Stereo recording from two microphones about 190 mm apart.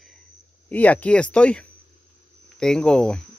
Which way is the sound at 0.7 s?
10° left (ahead or behind).